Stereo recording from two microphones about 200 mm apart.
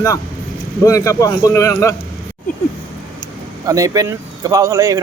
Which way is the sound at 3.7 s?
15° right (ahead or behind).